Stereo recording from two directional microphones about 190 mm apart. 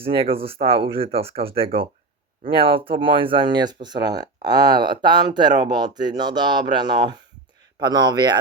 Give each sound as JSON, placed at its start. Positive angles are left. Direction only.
{"t": 0.0, "sound": "speech", "side_deg": -30}